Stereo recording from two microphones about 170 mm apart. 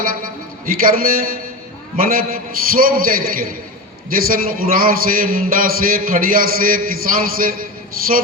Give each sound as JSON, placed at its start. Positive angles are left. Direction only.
{"t": 0.0, "sound": "a man's voice", "side_deg": -55}